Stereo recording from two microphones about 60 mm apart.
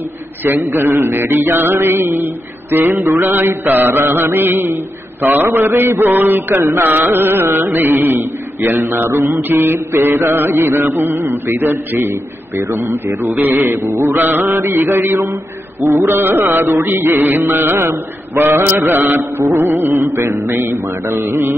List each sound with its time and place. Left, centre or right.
0.7 s mantra: right
15.8 s mantra: right